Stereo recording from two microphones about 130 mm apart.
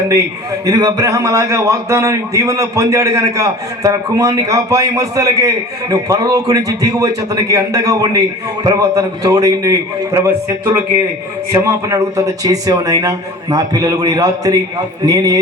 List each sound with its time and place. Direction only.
0.6 s a man's voice: 30° right (ahead or behind)